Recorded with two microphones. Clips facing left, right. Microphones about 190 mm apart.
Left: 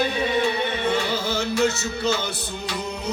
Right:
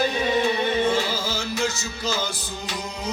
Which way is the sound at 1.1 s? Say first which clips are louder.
Left 4 dB; 65° left (ahead or behind).